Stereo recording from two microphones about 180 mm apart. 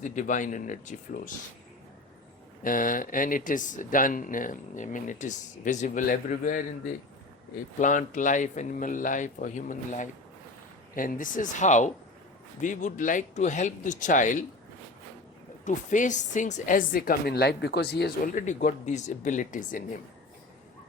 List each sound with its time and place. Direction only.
0.0 s speech: 45° left (ahead or behind)
2.6 s speech: 50° left (ahead or behind)
7.8 s speech: 45° left (ahead or behind)
15.6 s speech: 45° left (ahead or behind); by 18.1 s 65° left (ahead or behind)
18.3 s speech: 45° left (ahead or behind)